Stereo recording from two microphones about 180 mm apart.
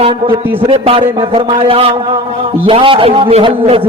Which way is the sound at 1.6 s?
30° right (ahead or behind).